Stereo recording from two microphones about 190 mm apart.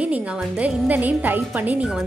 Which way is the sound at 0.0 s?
5° right (ahead or behind).